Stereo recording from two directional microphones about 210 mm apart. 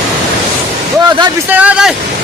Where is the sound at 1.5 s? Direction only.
5° right (ahead or behind).